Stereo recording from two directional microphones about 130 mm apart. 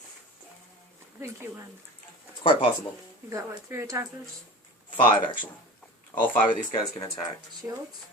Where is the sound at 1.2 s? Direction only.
20° right (ahead or behind).